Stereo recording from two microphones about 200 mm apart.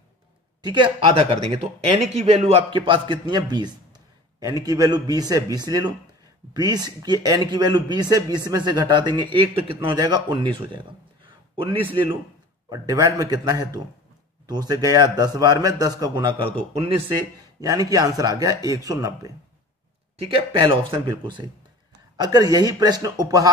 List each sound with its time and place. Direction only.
0.6 s a man's voice: 20° right (ahead or behind)
17.6 s a man's voice: 20° right (ahead or behind)